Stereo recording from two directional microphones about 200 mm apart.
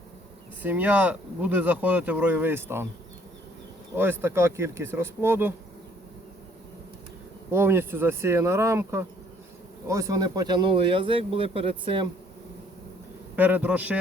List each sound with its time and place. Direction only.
0.6 s speech: 10° right (ahead or behind)
3.9 s speech: 10° right (ahead or behind)
7.5 s speech: 10° right (ahead or behind)
13.3 s speech: 10° right (ahead or behind)